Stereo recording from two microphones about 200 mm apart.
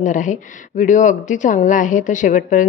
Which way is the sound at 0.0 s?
40° left (ahead or behind).